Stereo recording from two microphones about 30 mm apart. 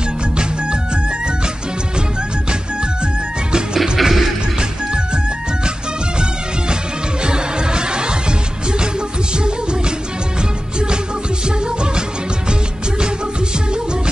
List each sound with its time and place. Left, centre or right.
3.5 s music: right
4.6 s music: right
7.2 s music: right
11.4 s music: right